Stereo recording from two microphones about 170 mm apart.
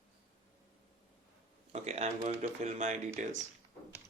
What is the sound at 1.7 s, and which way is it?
Speech, 40° right (ahead or behind).